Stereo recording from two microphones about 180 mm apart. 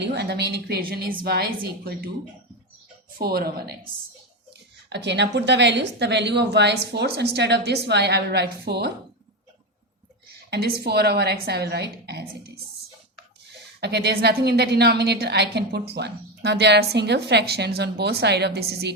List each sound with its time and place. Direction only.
0.0 s a woman's voice: 65° right (ahead or behind)
3.2 s a woman's voice: 60° right (ahead or behind)
4.9 s a woman's voice: 70° right (ahead or behind)
10.5 s a woman's voice: 65° right (ahead or behind)
13.8 s a woman's voice: 65° right (ahead or behind)